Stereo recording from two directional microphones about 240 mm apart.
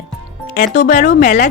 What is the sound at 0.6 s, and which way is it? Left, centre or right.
Speech, left.